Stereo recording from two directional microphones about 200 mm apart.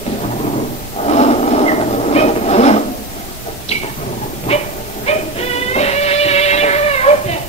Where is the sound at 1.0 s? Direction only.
35° left (ahead or behind).